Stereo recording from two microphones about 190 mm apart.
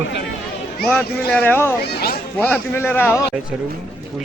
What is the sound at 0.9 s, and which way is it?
A man's voice, 5° left (ahead or behind).